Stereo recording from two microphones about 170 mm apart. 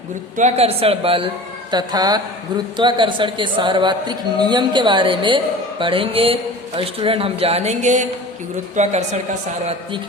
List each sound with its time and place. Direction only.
0.3 s a man's voice: 40° right (ahead or behind)
1.7 s a man's voice: 25° right (ahead or behind); by 9.2 s 40° right (ahead or behind)